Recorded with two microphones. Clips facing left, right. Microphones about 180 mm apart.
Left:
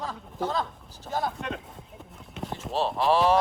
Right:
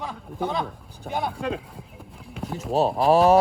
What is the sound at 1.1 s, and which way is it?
Speech, 60° right (ahead or behind).